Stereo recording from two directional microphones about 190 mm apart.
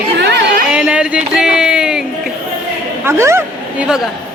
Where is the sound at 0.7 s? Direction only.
5° right (ahead or behind).